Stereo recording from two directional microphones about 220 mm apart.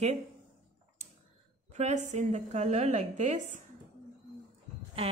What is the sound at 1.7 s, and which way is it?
A woman's voice, 30° right (ahead or behind).